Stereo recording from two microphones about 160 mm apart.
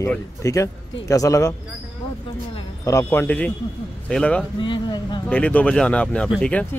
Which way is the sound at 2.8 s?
15° left (ahead or behind).